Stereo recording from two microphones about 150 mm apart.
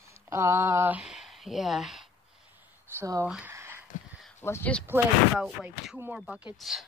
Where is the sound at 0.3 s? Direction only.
20° right (ahead or behind); by 2.0 s centre (ahead or behind).